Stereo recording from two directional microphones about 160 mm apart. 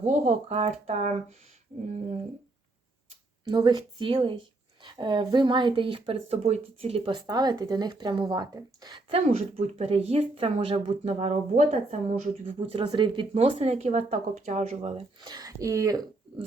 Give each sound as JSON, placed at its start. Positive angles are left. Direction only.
{"t": 0.0, "sound": "speech", "side_deg": -45}
{"t": 3.4, "sound": "speech", "side_deg": -25}
{"t": 12.5, "sound": "speech", "side_deg": -35}